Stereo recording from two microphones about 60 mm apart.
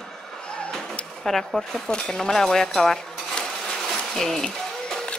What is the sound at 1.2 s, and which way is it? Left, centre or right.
Speech, centre.